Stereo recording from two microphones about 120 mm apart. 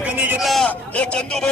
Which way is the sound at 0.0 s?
10° right (ahead or behind).